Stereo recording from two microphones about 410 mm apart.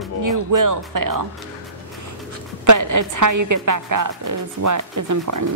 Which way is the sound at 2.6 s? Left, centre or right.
Right.